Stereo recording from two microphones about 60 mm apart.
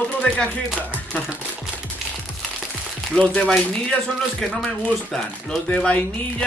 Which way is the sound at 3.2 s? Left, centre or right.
Centre.